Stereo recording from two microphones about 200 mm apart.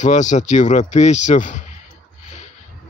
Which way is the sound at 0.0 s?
35° left (ahead or behind).